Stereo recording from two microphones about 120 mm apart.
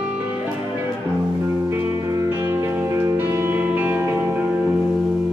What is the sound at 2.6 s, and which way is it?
Music, 20° right (ahead or behind).